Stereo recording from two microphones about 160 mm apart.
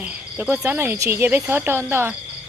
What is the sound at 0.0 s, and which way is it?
Speech, 10° right (ahead or behind).